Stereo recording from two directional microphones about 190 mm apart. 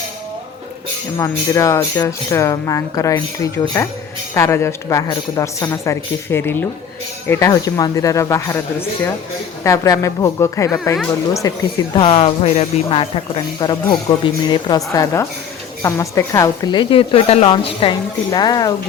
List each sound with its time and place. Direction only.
1.2 s a woman's voice: 15° left (ahead or behind)